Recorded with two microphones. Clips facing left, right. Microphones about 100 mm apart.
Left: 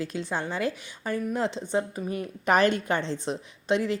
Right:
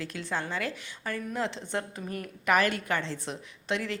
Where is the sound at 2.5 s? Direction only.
25° left (ahead or behind).